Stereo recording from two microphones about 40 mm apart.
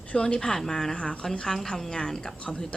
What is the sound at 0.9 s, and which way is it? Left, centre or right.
Speech, left.